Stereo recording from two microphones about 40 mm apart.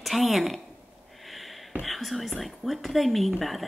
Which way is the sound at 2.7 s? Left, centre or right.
Centre.